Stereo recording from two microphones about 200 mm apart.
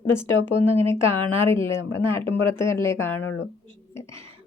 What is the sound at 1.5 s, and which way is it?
Speech, 15° left (ahead or behind).